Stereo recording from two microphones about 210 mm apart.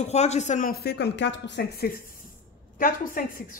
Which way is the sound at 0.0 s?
30° left (ahead or behind).